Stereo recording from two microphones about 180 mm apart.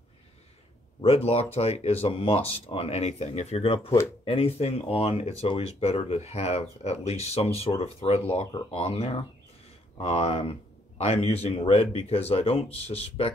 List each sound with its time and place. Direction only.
1.0 s speech: 35° left (ahead or behind)
3.9 s speech: 15° left (ahead or behind)
4.3 s speech: 35° left (ahead or behind)